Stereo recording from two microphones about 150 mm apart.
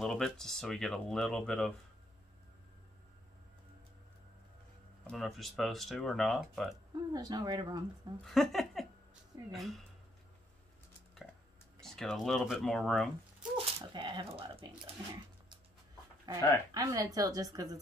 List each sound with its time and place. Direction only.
0.0 s speech: centre (ahead or behind)
5.0 s speech: centre (ahead or behind)
7.1 s speech: 25° right (ahead or behind)
8.2 s speech: centre (ahead or behind)
11.8 s speech: 5° left (ahead or behind)
13.7 s speech: 30° right (ahead or behind)
16.3 s speech: 20° left (ahead or behind)
16.7 s speech: 25° right (ahead or behind)